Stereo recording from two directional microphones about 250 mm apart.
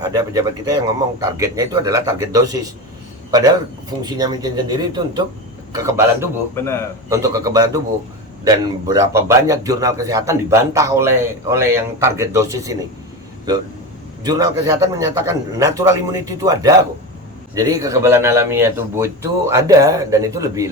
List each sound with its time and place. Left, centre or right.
0.1 s a man's voice: centre
14.3 s a man's voice: centre